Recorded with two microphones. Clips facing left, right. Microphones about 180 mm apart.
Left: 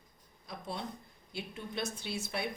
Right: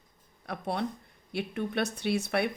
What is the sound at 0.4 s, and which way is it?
Speech, 65° right (ahead or behind).